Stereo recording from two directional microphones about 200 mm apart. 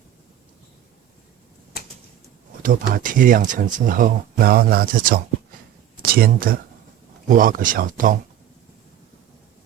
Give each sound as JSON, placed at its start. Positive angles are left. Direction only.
{"t": 1.7, "sound": "typewriter", "side_deg": 50}
{"t": 2.6, "sound": "speech", "side_deg": -45}